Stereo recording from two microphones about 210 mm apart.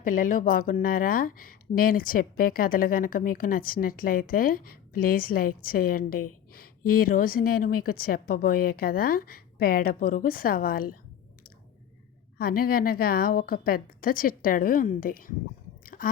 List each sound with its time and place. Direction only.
0.0 s speech: 40° left (ahead or behind)
12.4 s speech: 45° left (ahead or behind)
15.8 s chewing: 40° left (ahead or behind)